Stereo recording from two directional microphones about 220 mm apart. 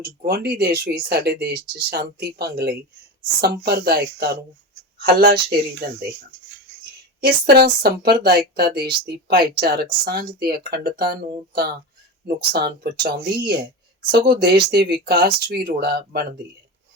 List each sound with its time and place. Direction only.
0.0 s a woman's voice: 45° right (ahead or behind)
7.2 s a woman's voice: 45° right (ahead or behind)